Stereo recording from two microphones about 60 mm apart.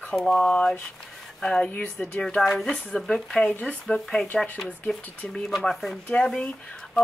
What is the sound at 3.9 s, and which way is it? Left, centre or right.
Speech, centre.